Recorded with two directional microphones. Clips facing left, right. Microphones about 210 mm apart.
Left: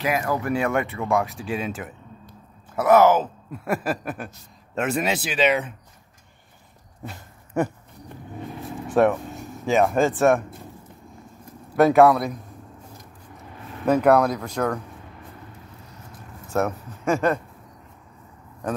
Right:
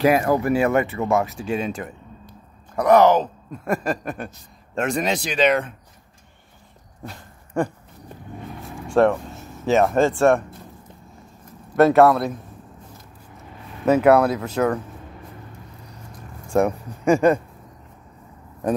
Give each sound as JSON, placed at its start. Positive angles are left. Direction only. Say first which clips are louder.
{"t": 0.0, "sound": "speech", "louder": "right 7 dB", "side_deg": -35}
{"t": 0.4, "sound": "speech", "louder": "right 4 dB", "side_deg": -5}
{"t": 8.8, "sound": "a sound", "louder": "right 2 dB", "side_deg": 5}
{"t": 10.0, "sound": "speech", "louder": "right 2 dB", "side_deg": 15}
{"t": 11.7, "sound": "speech", "louder": "right 1 dB", "side_deg": 0}
{"t": 13.8, "sound": "speech", "louder": "right 2 dB", "side_deg": -5}
{"t": 16.5, "sound": "speech", "louder": "right 5 dB", "side_deg": -15}
{"t": 17.1, "sound": "speech", "louder": "right 5 dB", "side_deg": 0}